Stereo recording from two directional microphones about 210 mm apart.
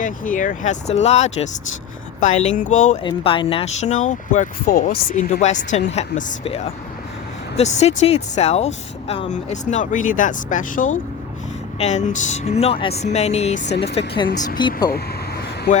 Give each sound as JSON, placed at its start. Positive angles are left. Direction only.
{"t": 0.0, "sound": "speech", "side_deg": 40}
{"t": 3.0, "sound": "speech", "side_deg": 25}